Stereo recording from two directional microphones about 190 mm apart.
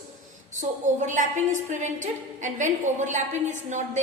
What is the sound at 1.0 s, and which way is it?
A woman's voice, 40° right (ahead or behind).